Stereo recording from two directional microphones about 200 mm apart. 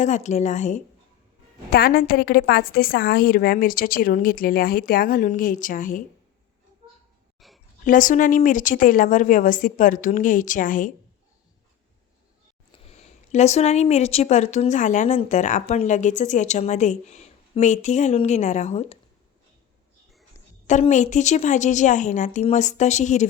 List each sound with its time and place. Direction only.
0.0 s a woman's voice: 35° left (ahead or behind)
7.3 s a sound: centre (ahead or behind)
7.9 s a woman's voice: 40° left (ahead or behind)
13.0 s a woman's voice: 35° left (ahead or behind)
20.7 s a woman's voice: 40° left (ahead or behind)